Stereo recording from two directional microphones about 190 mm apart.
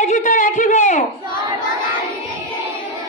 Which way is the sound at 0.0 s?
40° left (ahead or behind).